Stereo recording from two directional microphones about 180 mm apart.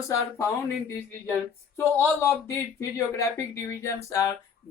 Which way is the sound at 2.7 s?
15° left (ahead or behind).